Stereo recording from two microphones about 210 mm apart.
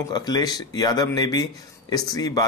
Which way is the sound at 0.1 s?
20° left (ahead or behind).